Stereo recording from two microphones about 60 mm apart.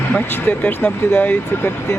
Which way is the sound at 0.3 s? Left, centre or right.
Left.